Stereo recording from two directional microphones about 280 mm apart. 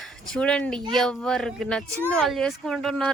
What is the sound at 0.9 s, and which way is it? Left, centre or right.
Speech, centre.